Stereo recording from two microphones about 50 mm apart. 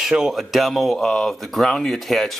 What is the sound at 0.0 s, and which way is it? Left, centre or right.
Speech, centre.